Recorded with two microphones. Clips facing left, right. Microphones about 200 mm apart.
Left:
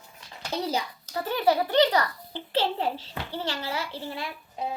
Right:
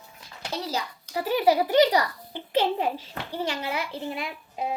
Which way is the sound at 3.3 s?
15° right (ahead or behind).